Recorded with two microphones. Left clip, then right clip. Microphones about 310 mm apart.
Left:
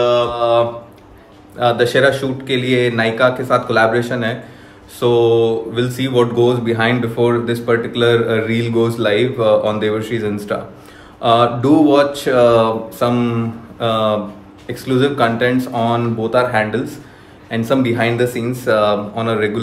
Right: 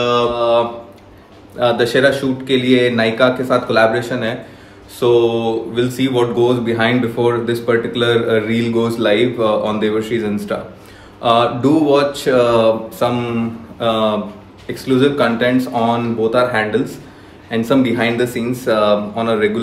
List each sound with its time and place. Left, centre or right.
0.0 s mantra: centre
1.6 s speech: centre
11.1 s mantra: centre
13.7 s speech: centre